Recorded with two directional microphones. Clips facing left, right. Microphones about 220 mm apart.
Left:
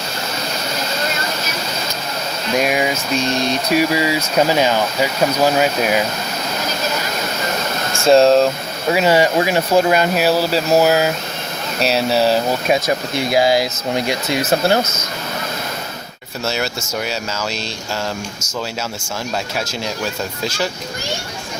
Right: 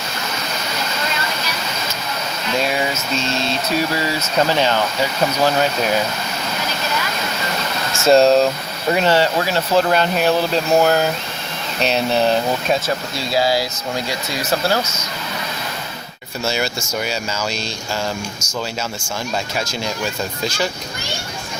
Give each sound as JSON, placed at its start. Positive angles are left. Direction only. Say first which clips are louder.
{"t": 2.6, "sound": "speech", "louder": "left 3 dB", "side_deg": 15}
{"t": 7.9, "sound": "speech", "louder": "left 1 dB", "side_deg": 0}
{"t": 13.1, "sound": "speech", "louder": "left 4 dB", "side_deg": 20}